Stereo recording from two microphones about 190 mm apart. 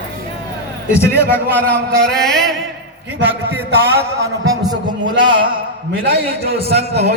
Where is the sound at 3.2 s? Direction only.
10° right (ahead or behind).